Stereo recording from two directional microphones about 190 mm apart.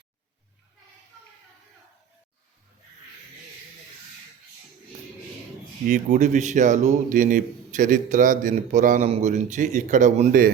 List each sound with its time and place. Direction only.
5.8 s a man's voice: 40° right (ahead or behind)